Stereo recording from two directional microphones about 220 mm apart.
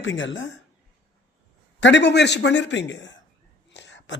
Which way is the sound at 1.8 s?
55° left (ahead or behind).